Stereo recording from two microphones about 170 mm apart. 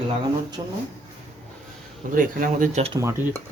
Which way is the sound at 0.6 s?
25° right (ahead or behind).